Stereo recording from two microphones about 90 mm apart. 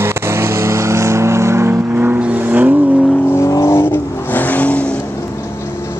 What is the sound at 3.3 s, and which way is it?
Vehicle, 35° left (ahead or behind).